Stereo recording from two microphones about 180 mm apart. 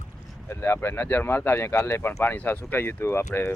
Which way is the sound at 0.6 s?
15° left (ahead or behind).